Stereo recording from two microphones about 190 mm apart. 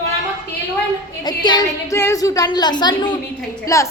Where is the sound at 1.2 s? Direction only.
20° left (ahead or behind).